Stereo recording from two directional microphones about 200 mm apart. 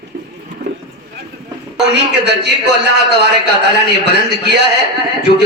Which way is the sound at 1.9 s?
55° right (ahead or behind).